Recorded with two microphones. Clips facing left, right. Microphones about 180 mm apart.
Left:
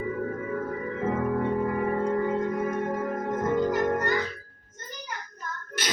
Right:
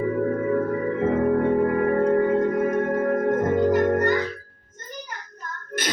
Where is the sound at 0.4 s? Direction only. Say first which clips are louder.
Right 8 dB; 60° right (ahead or behind).